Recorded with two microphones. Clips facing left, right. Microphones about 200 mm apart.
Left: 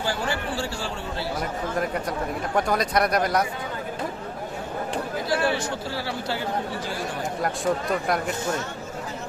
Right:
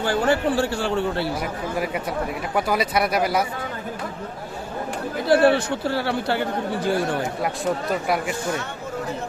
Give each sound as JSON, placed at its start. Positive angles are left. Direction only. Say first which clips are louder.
{"t": 0.0, "sound": "a man's voice", "louder": "right 7 dB", "side_deg": -60}
{"t": 2.6, "sound": "speech", "louder": "right 1 dB", "side_deg": -5}
{"t": 5.3, "sound": "a man's voice", "louder": "right 9 dB", "side_deg": -60}
{"t": 7.4, "sound": "speech", "louder": "left 3 dB", "side_deg": -5}